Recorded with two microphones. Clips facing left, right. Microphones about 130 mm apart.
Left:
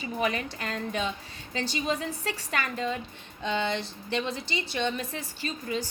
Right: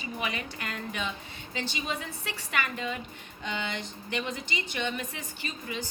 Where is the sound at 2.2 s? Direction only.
40° left (ahead or behind).